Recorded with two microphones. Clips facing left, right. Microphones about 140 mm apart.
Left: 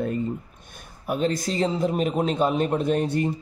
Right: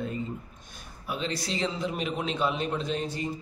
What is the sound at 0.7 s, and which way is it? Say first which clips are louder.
A man's voice: left 7 dB; 50° left (ahead or behind).